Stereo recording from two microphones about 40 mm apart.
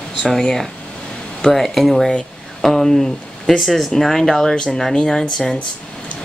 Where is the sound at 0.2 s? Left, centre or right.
Centre.